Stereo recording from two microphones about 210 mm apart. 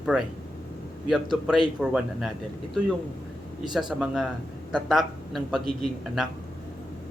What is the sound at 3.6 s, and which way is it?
A man's voice, centre (ahead or behind).